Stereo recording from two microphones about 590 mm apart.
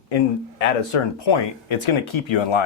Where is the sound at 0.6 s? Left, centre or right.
Left.